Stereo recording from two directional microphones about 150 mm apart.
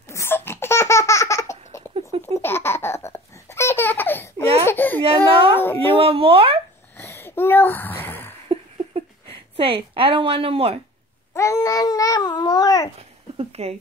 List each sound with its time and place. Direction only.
0.1 s laughter: 15° left (ahead or behind)
2.2 s babbling: 15° left (ahead or behind)
4.6 s baby cry: 10° left (ahead or behind)
5.0 s a child's voice: 35° right (ahead or behind)
5.6 s a woman's voice: 15° left (ahead or behind)
5.9 s speech: 40° right (ahead or behind)
7.0 s a sound: 15° left (ahead or behind)
9.6 s a woman's voice: 40° right (ahead or behind)
11.3 s babbling: 20° left (ahead or behind)
13.4 s a sound: 45° right (ahead or behind)